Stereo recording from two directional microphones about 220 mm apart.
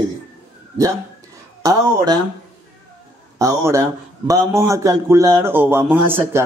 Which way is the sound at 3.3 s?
15° right (ahead or behind).